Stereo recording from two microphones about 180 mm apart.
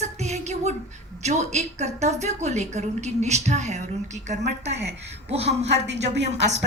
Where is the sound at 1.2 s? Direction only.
40° right (ahead or behind).